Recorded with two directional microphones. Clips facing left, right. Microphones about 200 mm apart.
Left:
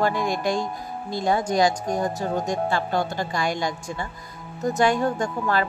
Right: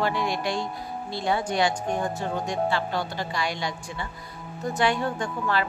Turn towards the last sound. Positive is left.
turn(degrees=45)  # may be behind; listen again after turning